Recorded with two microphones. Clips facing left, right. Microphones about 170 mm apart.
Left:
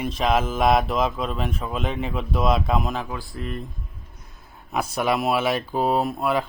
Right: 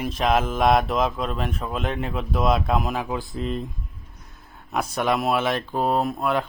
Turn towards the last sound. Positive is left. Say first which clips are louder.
# even
turn(degrees=0)  # may be behind; listen again after turning